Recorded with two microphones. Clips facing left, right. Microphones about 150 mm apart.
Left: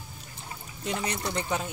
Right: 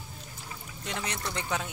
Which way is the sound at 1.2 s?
35° left (ahead or behind).